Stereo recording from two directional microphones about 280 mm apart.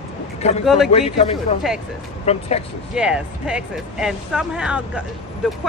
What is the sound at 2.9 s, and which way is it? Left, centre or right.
Speech, centre.